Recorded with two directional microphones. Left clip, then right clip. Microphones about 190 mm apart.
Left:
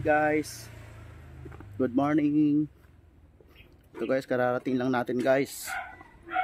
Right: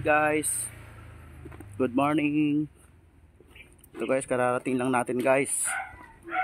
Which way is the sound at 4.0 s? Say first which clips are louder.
Right 1 dB; 15° left (ahead or behind).